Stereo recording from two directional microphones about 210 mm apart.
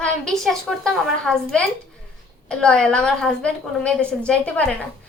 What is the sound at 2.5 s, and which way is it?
A woman's voice, 5° left (ahead or behind).